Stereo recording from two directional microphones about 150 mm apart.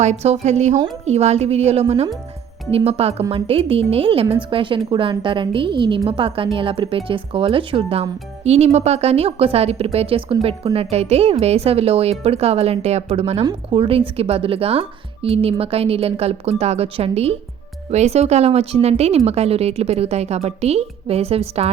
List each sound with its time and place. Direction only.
0.0 s speech: 45° right (ahead or behind)
13.4 s speech: 30° right (ahead or behind)